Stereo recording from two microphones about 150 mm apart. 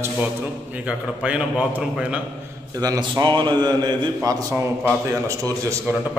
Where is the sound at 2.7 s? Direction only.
25° right (ahead or behind).